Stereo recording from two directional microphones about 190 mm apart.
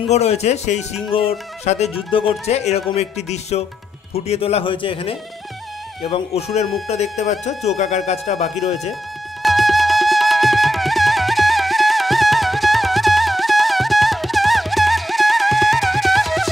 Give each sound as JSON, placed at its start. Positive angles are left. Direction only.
{"t": 0.1, "sound": "speech", "side_deg": 35}
{"t": 9.4, "sound": "flute", "side_deg": 0}